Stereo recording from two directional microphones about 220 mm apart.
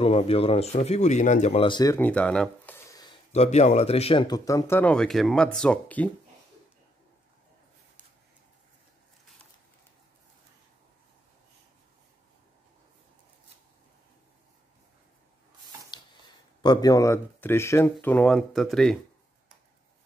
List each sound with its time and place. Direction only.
0.0 s speech: 25° left (ahead or behind); by 3.1 s 10° left (ahead or behind)
3.3 s speech: 30° left (ahead or behind); by 6.0 s 5° left (ahead or behind)
16.6 s speech: 20° left (ahead or behind); by 18.9 s centre (ahead or behind)